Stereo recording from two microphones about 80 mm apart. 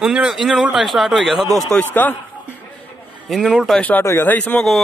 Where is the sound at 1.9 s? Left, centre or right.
Left.